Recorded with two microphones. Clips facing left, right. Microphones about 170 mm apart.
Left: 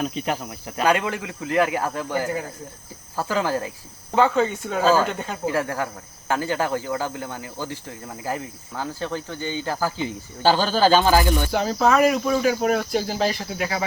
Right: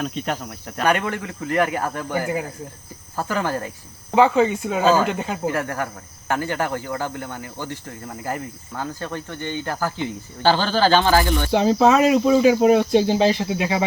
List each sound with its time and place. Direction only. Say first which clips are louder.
0.0 s speech: even; 5° left (ahead or behind)
2.2 s speech: right 2 dB; 5° right (ahead or behind)
3.2 s speech: left 1 dB; 10° left (ahead or behind)
4.1 s speech: right 3 dB; 5° right (ahead or behind)
5.5 s speech: left 3 dB; 10° left (ahead or behind)
11.5 s speech: right 5 dB; 20° right (ahead or behind)